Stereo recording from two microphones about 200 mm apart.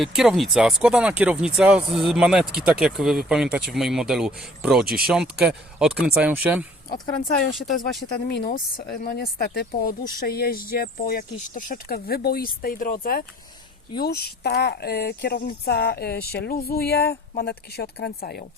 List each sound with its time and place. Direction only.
0.0 s speech: centre (ahead or behind)
8.3 s speech: 50° left (ahead or behind)